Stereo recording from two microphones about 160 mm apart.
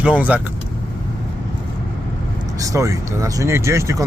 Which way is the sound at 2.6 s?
20° right (ahead or behind).